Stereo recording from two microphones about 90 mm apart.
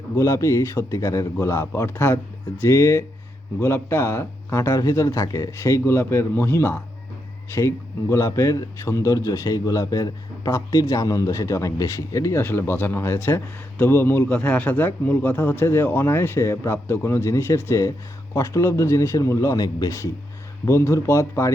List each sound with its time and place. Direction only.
0.2 s a man's voice: 35° left (ahead or behind)
8.1 s a man's voice: 35° left (ahead or behind)
14.3 s a man's voice: 15° left (ahead or behind); by 21.5 s 30° left (ahead or behind)